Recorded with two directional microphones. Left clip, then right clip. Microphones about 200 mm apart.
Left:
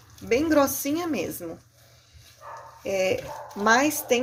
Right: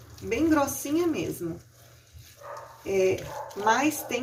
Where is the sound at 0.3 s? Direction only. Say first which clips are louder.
Left 3 dB; 55° left (ahead or behind).